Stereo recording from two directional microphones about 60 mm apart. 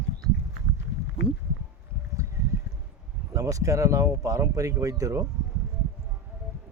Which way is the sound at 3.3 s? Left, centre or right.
Right.